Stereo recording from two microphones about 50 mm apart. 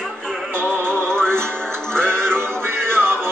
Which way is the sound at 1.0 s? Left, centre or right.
Centre.